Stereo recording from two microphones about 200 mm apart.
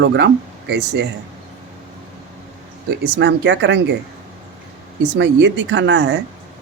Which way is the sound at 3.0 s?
60° right (ahead or behind).